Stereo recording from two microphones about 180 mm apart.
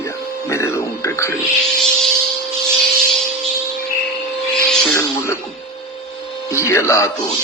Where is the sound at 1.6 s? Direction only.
5° left (ahead or behind).